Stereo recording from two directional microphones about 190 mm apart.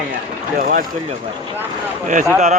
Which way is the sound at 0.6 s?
50° right (ahead or behind).